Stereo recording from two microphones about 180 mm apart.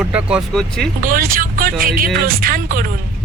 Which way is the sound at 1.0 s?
50° right (ahead or behind).